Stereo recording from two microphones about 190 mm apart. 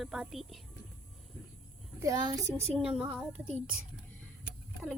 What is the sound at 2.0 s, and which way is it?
A child's voice, 20° right (ahead or behind).